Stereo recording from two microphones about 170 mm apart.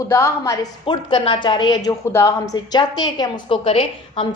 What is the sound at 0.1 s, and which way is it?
A woman's voice, 15° left (ahead or behind).